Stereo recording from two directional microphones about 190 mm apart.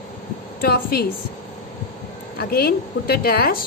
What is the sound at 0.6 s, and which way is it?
Speech, 55° left (ahead or behind).